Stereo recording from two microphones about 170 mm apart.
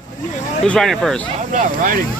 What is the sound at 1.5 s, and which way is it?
Speech, 50° right (ahead or behind).